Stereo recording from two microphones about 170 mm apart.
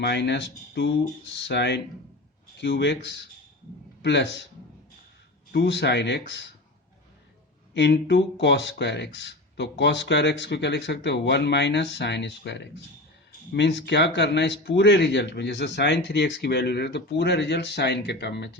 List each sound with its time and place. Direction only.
0.0 s speech: 85° left
5.5 s speech: 80° left
7.7 s speech: 90° left